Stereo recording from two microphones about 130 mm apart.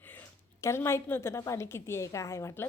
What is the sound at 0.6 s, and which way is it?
A woman's voice, 20° left (ahead or behind).